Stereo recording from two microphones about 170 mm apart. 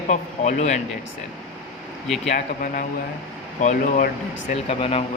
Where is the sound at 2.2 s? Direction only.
50° left (ahead or behind).